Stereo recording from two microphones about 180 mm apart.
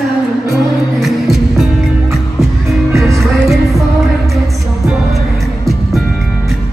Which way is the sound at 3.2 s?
Centre (ahead or behind).